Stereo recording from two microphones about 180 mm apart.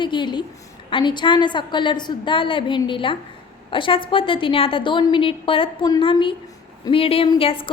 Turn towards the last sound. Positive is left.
turn(degrees=30)  # may be behind; listen again after turning